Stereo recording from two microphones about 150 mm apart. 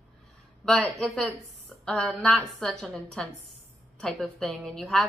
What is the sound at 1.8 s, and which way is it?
A woman's voice, 5° left (ahead or behind).